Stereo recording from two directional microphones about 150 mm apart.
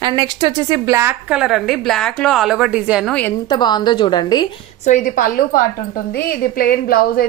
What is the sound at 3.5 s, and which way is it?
Speech, 30° left (ahead or behind).